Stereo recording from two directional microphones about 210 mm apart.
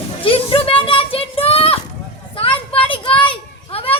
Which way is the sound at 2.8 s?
25° left (ahead or behind).